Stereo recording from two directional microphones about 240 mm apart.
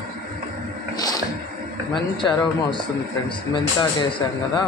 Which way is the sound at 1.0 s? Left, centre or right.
Centre.